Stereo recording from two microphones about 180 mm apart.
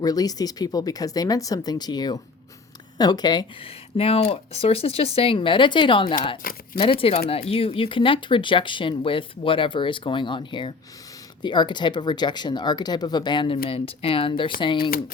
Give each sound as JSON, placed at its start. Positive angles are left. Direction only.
{"t": 0.0, "sound": "speech", "side_deg": 20}
{"t": 6.4, "sound": "speech", "side_deg": 55}
{"t": 7.0, "sound": "speech", "side_deg": 30}
{"t": 14.8, "sound": "speech", "side_deg": 55}